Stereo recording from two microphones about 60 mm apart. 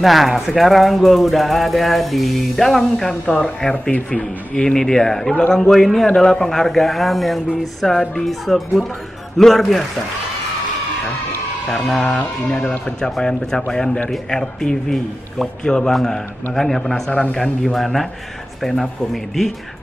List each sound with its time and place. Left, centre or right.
0.0 s a man's voice: centre
11.7 s a man's voice: centre
17.7 s a man's voice: centre